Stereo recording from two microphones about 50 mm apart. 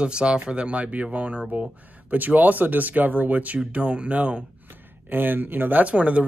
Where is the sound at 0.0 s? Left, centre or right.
Centre.